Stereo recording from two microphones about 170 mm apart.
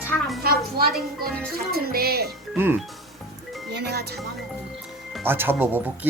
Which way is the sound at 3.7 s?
75° right (ahead or behind).